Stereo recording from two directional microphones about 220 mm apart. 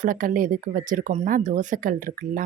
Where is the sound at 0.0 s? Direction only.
40° right (ahead or behind).